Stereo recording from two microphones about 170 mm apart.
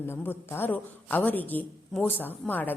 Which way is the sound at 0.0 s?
15° left (ahead or behind).